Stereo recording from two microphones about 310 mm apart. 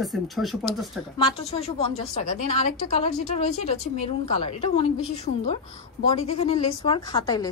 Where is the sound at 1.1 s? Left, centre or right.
Centre.